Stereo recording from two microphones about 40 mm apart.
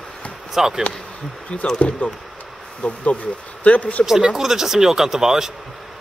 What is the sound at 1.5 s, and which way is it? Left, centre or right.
Speech, left.